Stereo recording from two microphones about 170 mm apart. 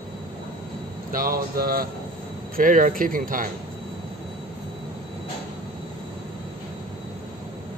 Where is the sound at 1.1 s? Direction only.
60° right (ahead or behind).